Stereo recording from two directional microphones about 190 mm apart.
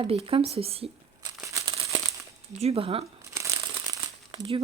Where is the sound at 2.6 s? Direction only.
30° right (ahead or behind).